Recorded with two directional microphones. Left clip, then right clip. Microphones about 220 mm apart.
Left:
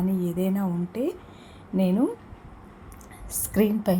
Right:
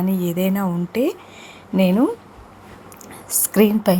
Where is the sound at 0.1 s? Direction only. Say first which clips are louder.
Right 6 dB; 20° right (ahead or behind).